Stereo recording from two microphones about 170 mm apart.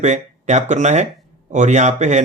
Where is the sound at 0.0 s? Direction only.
45° right (ahead or behind).